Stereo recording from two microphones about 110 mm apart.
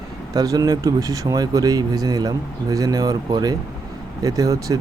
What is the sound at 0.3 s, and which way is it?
Speech, 35° right (ahead or behind).